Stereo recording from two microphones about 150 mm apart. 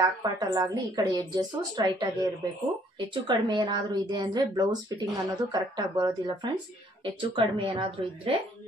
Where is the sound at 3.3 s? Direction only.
30° right (ahead or behind).